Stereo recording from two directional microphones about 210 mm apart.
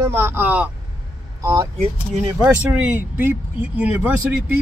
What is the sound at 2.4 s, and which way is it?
Speech, 5° right (ahead or behind).